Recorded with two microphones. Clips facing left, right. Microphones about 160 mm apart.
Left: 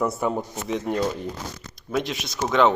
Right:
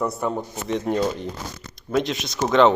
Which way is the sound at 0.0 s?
5° left (ahead or behind).